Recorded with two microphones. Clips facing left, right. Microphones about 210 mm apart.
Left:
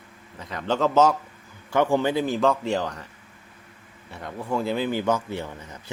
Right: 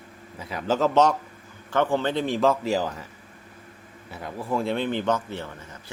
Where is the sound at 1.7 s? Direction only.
15° left (ahead or behind); by 3.0 s 5° right (ahead or behind).